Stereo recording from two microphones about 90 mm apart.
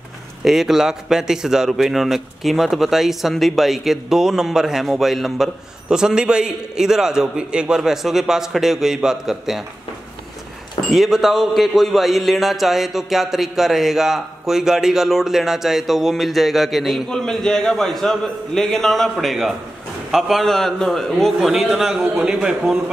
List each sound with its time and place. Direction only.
0.4 s a man's voice: 5° right (ahead or behind)
10.9 s a man's voice: centre (ahead or behind)